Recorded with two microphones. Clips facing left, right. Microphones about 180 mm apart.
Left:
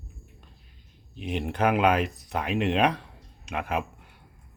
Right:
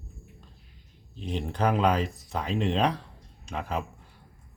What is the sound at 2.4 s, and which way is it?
Speech, 65° left (ahead or behind).